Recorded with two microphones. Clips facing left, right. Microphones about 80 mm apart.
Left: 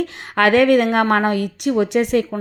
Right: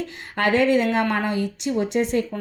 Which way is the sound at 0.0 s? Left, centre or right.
Left.